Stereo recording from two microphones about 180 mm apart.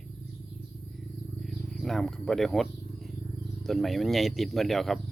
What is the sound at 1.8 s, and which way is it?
Speech, centre (ahead or behind).